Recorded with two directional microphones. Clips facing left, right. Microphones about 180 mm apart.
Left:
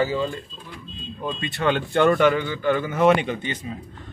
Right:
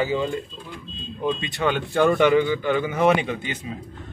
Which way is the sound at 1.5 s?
10° right (ahead or behind).